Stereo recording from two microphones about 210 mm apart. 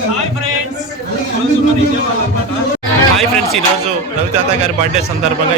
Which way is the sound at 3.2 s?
Centre (ahead or behind).